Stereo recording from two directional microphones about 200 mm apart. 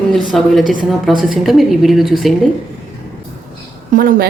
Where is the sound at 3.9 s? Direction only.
45° right (ahead or behind).